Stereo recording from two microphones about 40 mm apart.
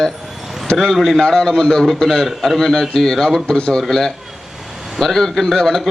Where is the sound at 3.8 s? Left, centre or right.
Centre.